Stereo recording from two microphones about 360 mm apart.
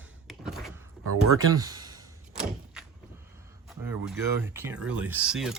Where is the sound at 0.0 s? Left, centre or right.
Centre.